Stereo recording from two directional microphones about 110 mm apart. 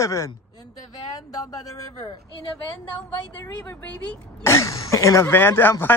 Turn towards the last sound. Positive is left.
turn(degrees=20)  # may be behind; listen again after turning